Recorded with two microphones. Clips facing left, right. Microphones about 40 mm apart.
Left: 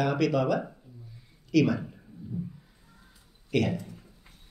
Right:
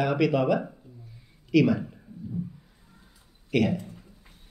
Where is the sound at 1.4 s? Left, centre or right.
Centre.